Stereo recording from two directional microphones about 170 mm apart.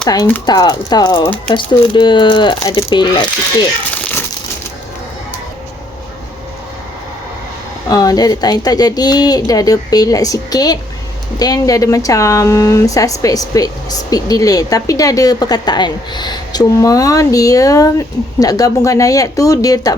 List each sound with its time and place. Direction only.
0.0 s speech: 25° left (ahead or behind)
7.9 s speech: 20° left (ahead or behind)